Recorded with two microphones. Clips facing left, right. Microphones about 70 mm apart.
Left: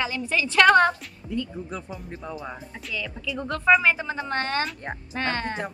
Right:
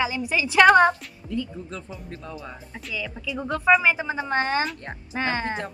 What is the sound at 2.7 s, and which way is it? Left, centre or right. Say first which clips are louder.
A woman's voice: right 1 dB; centre.